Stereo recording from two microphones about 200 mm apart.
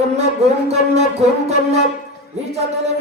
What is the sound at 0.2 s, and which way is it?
Music, 30° right (ahead or behind).